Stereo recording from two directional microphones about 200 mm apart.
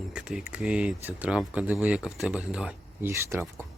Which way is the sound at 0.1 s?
5° right (ahead or behind).